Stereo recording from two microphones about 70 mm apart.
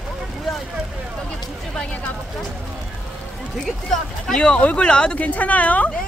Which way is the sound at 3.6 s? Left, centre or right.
Centre.